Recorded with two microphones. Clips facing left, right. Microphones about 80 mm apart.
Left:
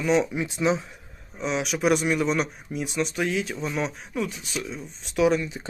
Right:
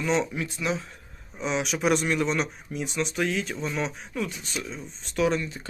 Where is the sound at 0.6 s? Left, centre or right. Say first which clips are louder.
Left 6 dB; left.